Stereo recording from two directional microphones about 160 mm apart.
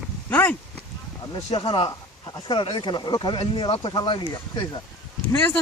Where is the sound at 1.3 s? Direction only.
30° left (ahead or behind).